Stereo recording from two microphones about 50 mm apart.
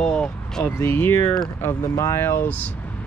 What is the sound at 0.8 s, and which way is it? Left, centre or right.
Speech, left.